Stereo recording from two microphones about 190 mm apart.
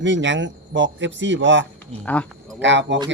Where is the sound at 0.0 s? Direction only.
75° right (ahead or behind).